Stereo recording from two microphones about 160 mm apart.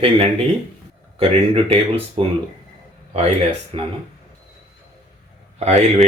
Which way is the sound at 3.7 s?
35° right (ahead or behind).